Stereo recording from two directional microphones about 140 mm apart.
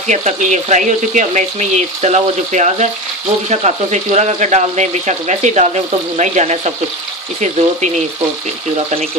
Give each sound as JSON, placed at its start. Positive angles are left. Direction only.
{"t": 0.0, "sound": "speech", "side_deg": -60}